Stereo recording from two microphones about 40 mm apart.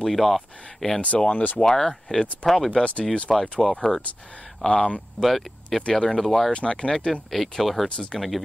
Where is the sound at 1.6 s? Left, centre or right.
Centre.